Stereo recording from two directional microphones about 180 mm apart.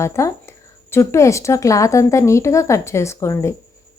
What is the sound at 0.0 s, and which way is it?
A woman's voice, 15° left (ahead or behind).